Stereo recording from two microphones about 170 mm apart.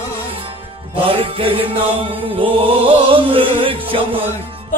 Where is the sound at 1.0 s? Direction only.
35° right (ahead or behind).